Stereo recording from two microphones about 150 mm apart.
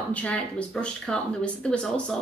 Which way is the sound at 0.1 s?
10° left (ahead or behind).